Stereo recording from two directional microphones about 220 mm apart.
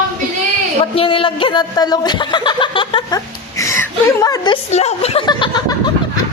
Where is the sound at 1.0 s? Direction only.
25° left (ahead or behind).